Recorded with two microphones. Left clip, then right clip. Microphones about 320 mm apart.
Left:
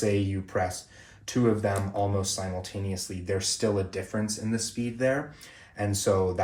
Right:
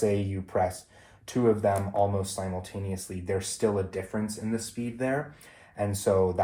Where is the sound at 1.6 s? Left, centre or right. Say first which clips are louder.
Right 3 dB; centre.